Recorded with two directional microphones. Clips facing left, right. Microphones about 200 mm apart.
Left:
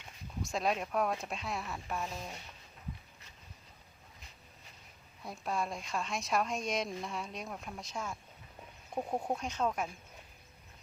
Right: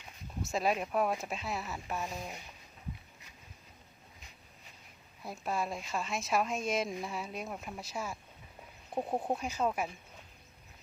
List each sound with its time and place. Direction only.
0.4 s a woman's voice: 5° right (ahead or behind)
2.0 s speech: 15° right (ahead or behind)
5.2 s a woman's voice: 5° right (ahead or behind)
9.0 s speech: 15° right (ahead or behind)
9.3 s speech: 5° right (ahead or behind)